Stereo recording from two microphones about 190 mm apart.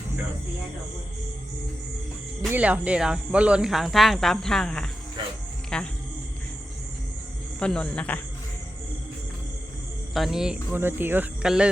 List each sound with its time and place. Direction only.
2.5 s speech: 5° right (ahead or behind)
5.2 s music: 25° right (ahead or behind)
5.7 s speech: 5° left (ahead or behind)
7.6 s speech: 5° left (ahead or behind)
10.2 s speech: centre (ahead or behind)